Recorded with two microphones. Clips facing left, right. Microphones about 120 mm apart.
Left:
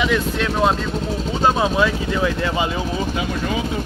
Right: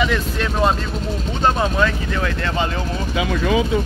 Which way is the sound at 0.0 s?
Centre (ahead or behind).